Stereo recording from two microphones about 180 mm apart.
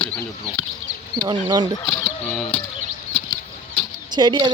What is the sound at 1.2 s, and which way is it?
Speech, 25° right (ahead or behind).